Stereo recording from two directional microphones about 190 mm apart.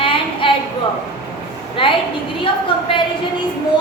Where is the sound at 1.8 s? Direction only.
25° left (ahead or behind).